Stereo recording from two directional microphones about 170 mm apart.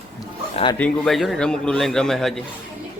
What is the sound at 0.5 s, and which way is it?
Speech, 30° left (ahead or behind).